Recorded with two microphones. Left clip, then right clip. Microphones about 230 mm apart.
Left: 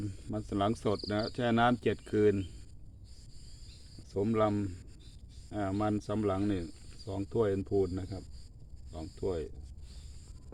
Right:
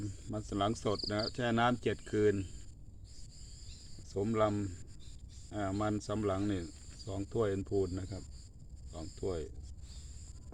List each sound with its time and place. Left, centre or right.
0.0 s speech: left
4.1 s speech: left